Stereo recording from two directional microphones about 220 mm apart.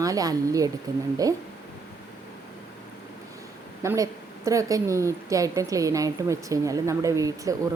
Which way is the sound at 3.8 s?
15° right (ahead or behind).